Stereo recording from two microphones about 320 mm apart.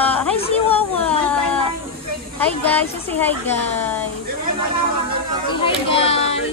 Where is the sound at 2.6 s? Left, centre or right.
Centre.